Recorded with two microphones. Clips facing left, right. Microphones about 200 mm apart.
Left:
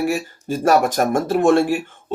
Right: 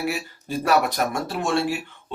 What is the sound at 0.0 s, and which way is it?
Speech, 45° left (ahead or behind).